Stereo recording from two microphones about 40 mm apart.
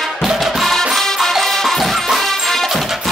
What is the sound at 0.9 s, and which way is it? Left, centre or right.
Music, centre.